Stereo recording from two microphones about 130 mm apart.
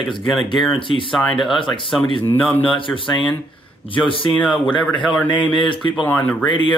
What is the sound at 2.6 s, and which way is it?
Speech, 40° left (ahead or behind).